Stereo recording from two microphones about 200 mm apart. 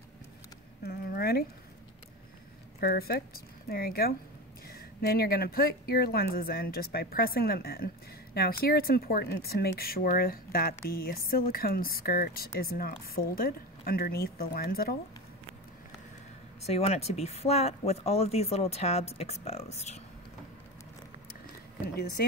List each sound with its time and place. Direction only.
0.8 s a sound: 50° left (ahead or behind)
2.8 s speech: 50° left (ahead or behind)
16.6 s speech: 30° left (ahead or behind)